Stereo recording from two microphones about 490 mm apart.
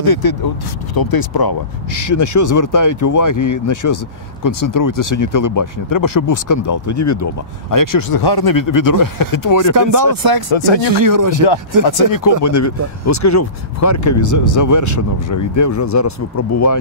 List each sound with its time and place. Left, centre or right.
0.0 s speech: left
9.8 s speech: right
10.5 s speech: left
10.9 s speech: right
11.8 s speech: left